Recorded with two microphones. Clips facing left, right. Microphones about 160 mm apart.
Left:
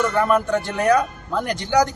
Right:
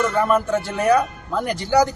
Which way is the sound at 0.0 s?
5° right (ahead or behind).